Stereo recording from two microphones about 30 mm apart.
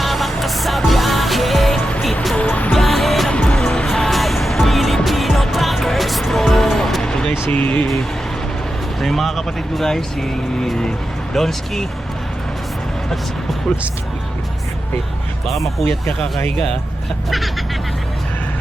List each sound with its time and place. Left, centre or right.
0.0 s music: centre
2.4 s music: left
2.7 s music: centre
3.5 s music: left
3.8 s music: centre
4.1 s music: centre
7.0 s music: left
7.5 s speech: left
9.0 s speech: centre
9.8 s speech: centre
15.4 s speech: centre